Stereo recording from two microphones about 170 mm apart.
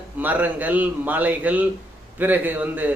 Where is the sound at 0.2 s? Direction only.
10° right (ahead or behind).